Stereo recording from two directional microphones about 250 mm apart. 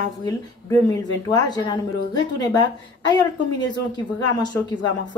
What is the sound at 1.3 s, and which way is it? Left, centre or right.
A woman's voice, centre.